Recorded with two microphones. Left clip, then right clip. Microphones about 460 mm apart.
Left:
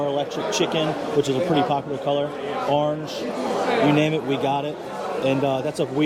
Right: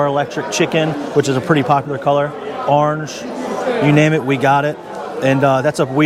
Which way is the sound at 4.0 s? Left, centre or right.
Right.